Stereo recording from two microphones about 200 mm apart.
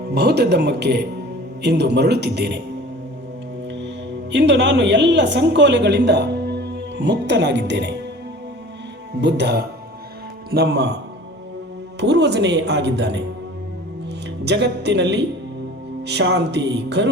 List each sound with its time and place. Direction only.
0.0 s speech: 55° right (ahead or behind)
3.7 s a woman's voice: 60° right (ahead or behind)
9.2 s speech: 55° right (ahead or behind)
11.9 s speech: 60° right (ahead or behind)
14.4 s speech: 60° right (ahead or behind)